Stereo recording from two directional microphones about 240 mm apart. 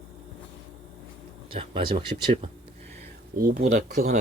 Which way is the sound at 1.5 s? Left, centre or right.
Right.